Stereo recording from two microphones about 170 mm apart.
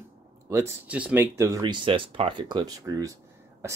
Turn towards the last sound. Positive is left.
turn(degrees=-25)  # may be behind; listen again after turning